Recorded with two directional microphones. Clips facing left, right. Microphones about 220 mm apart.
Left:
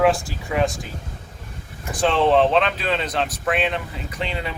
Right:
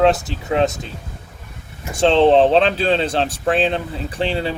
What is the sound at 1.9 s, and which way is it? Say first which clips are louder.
Speech: right 5 dB; 25° right (ahead or behind).